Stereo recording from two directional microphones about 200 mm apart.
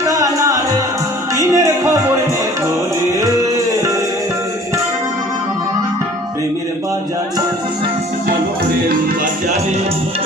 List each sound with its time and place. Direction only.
0.0 s music: 15° right (ahead or behind)
3.2 s music: 15° right (ahead or behind)